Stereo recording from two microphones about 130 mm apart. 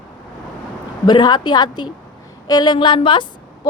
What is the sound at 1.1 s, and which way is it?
A woman's voice, 35° left (ahead or behind).